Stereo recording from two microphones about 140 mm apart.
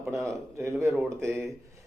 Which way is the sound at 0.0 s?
20° right (ahead or behind).